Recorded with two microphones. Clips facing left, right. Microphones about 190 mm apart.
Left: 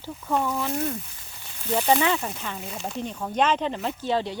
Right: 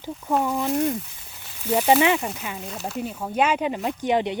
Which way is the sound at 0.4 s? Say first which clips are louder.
Right 4 dB; 20° right (ahead or behind).